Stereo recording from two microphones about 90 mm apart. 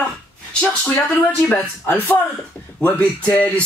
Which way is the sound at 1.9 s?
20° left (ahead or behind).